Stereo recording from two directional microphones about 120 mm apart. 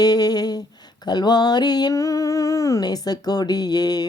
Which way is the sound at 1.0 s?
35° left (ahead or behind).